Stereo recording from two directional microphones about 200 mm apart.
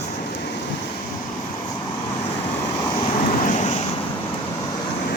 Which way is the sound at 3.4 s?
35° left (ahead or behind).